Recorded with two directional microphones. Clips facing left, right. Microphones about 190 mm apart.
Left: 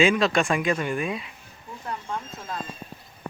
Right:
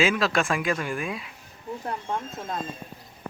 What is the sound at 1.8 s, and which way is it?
Speech, 25° right (ahead or behind).